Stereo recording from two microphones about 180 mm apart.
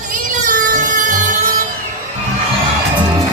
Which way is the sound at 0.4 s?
45° right (ahead or behind).